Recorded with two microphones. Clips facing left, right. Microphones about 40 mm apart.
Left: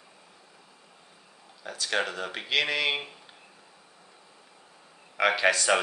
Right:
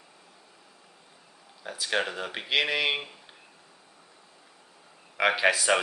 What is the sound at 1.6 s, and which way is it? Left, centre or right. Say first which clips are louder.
Speech: even; centre.